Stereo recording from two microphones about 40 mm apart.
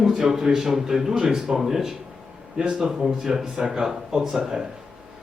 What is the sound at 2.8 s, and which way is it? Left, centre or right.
Speech, centre.